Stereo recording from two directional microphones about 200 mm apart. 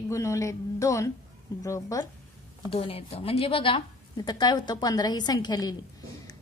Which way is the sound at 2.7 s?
30° left (ahead or behind).